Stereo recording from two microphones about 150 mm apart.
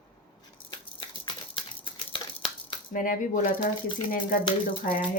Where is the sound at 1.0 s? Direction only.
35° left (ahead or behind).